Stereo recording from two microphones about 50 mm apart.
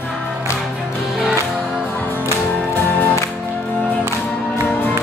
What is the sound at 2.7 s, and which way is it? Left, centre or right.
Music, left.